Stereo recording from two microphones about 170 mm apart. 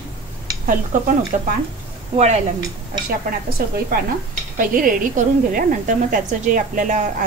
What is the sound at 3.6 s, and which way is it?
A woman's voice, 65° right (ahead or behind).